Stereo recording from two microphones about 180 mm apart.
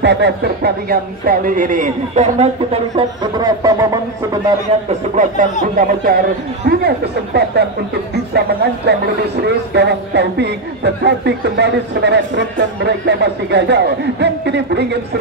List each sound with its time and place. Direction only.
0.0 s speech: 70° right (ahead or behind); by 4.4 s 20° right (ahead or behind)
5.1 s speech: 45° right (ahead or behind); by 15.0 s 70° right (ahead or behind)